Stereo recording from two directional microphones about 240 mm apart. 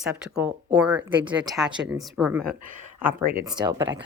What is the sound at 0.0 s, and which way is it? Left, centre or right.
Speech, centre.